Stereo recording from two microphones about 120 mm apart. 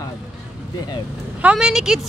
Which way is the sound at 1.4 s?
10° right (ahead or behind).